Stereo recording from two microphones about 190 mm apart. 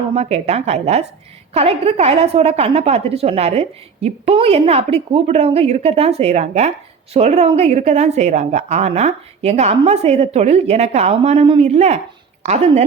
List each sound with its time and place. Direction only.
0.1 s a woman's voice: 35° right (ahead or behind)